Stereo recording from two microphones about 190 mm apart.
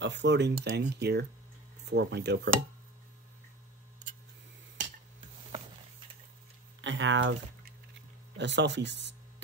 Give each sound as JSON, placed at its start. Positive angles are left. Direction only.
{"t": 0.0, "sound": "speech", "side_deg": -65}
{"t": 6.8, "sound": "speech", "side_deg": -75}